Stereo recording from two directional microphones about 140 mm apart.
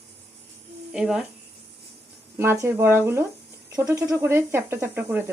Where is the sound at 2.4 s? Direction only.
15° right (ahead or behind).